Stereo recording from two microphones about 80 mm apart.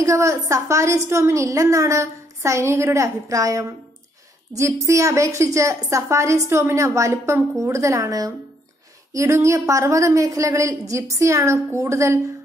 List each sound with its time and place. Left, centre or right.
0.0 s a woman's voice: right